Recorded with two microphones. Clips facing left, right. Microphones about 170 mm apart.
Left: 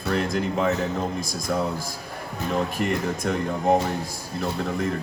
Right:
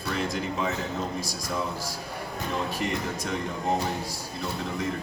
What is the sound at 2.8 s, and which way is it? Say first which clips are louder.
Speech: left 5 dB; 50° left (ahead or behind).